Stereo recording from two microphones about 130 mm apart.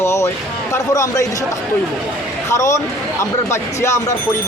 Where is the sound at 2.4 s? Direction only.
25° left (ahead or behind).